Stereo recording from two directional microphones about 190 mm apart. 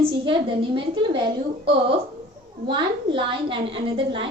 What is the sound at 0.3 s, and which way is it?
A woman's voice, 30° right (ahead or behind).